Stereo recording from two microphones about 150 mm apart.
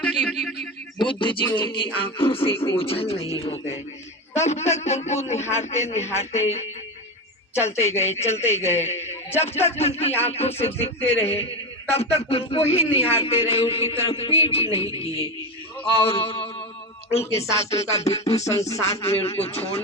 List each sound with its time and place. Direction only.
0.0 s a man's voice: 5° left (ahead or behind)
0.9 s music: 35° left (ahead or behind)
4.4 s a man's voice: 50° left (ahead or behind)
16.0 s mantra: 35° left (ahead or behind)
17.1 s a man's voice: 40° left (ahead or behind)